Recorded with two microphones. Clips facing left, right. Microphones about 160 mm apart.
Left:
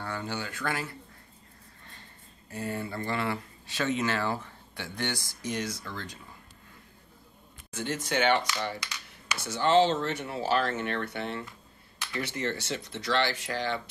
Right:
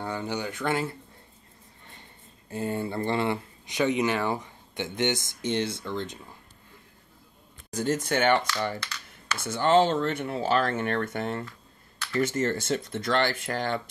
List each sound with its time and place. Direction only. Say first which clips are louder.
0.0 s speech: right 4 dB; 20° right (ahead or behind)
2.5 s speech: right 5 dB; 25° right (ahead or behind)
7.7 s speech: right 4 dB; 45° right (ahead or behind)
8.7 s computer keyboard: right 3 dB; 15° left (ahead or behind)
9.4 s speech: right 2 dB; 50° right (ahead or behind)